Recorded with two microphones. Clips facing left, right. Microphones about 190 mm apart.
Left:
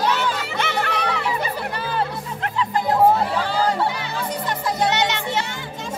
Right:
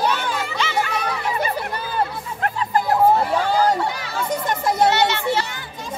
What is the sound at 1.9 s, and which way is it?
Music, 45° right (ahead or behind).